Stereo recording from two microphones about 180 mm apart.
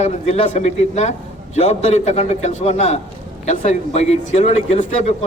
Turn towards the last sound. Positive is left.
turn(degrees=35)  # may be behind; listen again after turning